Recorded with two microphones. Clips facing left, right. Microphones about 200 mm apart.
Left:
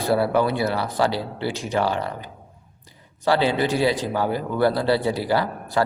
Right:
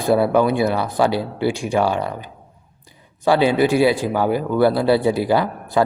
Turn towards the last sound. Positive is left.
turn(degrees=-15)  # may be behind; listen again after turning